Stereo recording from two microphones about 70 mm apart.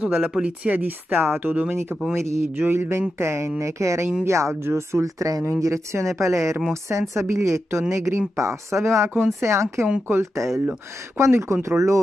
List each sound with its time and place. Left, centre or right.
0.3 s speech: centre; by 12.0 s right